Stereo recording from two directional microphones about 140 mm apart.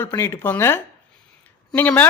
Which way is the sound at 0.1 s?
20° left (ahead or behind).